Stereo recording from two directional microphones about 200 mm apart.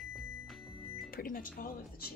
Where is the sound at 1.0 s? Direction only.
45° left (ahead or behind).